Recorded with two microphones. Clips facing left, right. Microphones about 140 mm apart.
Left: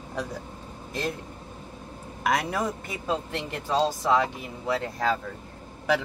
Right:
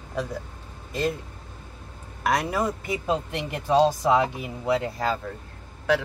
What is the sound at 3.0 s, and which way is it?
Speech, 15° right (ahead or behind).